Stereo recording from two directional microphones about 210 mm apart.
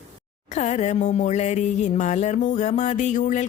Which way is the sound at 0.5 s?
30° left (ahead or behind).